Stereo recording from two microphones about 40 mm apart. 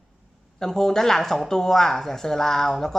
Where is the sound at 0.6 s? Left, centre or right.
Centre.